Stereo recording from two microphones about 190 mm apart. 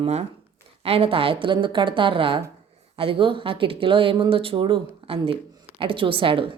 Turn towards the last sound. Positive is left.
turn(degrees=-25)  # may be behind; listen again after turning